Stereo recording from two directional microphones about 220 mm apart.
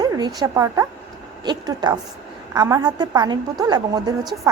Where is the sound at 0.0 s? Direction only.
15° right (ahead or behind).